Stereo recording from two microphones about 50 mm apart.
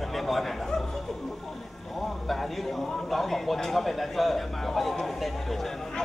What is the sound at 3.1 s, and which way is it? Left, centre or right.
Speech, centre.